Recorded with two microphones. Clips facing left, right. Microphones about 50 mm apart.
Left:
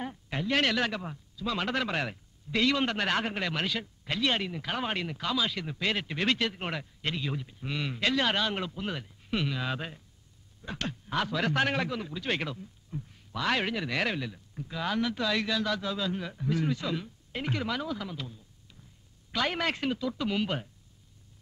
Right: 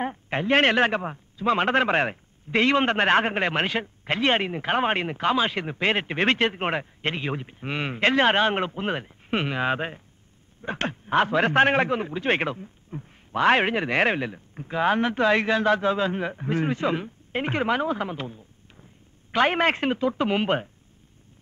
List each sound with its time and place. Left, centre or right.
0.0 s a man's voice: right